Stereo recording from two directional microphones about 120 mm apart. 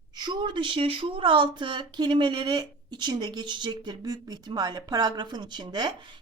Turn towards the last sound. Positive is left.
turn(degrees=-40)  # may be behind; listen again after turning